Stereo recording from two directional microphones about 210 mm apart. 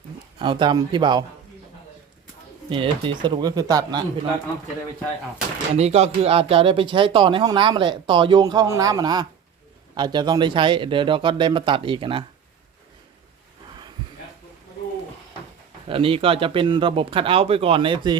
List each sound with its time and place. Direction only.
0.3 s speech: 20° right (ahead or behind)
2.6 s speech: 25° right (ahead or behind)
5.7 s speech: 30° right (ahead or behind)
15.9 s speech: 25° right (ahead or behind)